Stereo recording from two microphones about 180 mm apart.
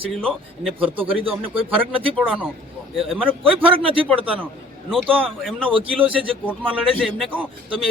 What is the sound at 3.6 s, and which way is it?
Speech, 30° right (ahead or behind).